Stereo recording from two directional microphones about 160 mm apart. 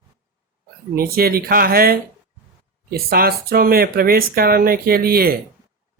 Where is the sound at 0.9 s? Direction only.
70° right (ahead or behind).